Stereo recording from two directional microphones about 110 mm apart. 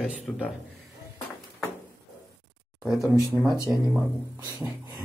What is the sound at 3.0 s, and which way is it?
Speech, 35° right (ahead or behind).